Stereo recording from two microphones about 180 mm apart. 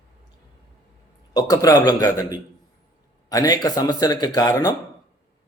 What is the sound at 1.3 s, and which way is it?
A man's voice, 20° left (ahead or behind).